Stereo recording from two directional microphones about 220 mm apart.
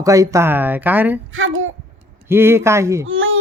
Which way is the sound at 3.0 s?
65° right (ahead or behind).